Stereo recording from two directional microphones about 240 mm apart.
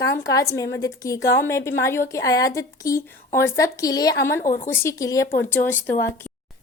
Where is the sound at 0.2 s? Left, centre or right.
Centre.